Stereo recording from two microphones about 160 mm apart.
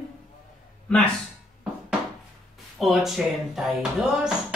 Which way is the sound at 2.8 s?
Centre (ahead or behind).